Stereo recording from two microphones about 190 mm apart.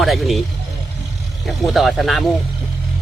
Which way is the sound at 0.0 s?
Centre (ahead or behind).